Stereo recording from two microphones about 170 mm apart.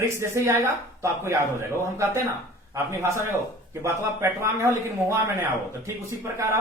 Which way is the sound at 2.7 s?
15° right (ahead or behind).